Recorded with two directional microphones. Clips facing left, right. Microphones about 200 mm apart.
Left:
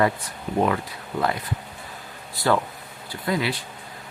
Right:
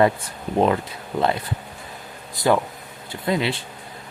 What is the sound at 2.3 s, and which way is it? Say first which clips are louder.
Speech: right 3 dB; 15° right (ahead or behind).